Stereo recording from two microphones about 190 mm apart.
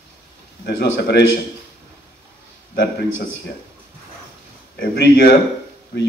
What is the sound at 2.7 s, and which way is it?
Speech, 55° left (ahead or behind).